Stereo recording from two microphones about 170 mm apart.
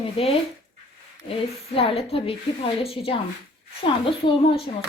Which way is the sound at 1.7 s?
35° left (ahead or behind).